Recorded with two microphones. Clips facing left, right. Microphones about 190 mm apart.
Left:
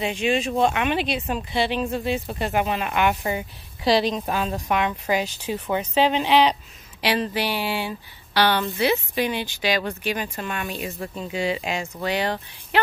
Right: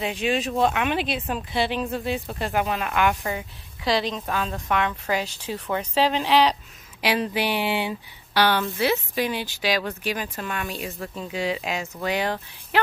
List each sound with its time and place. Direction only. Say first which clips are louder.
0.0 s speech: left 2 dB; centre (ahead or behind); by 5.2 s 15° left (ahead or behind)
5.5 s speech: left 2 dB; 5° left (ahead or behind); by 7.9 s 20° right (ahead or behind)
8.4 s speech: left 1 dB; 5° right (ahead or behind)